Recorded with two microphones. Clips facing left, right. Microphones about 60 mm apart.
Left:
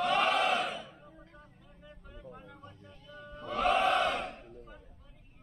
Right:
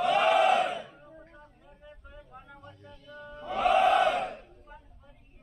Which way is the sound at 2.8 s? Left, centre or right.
Centre.